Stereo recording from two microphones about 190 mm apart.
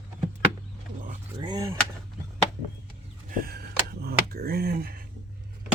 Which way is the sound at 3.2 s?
50° right (ahead or behind).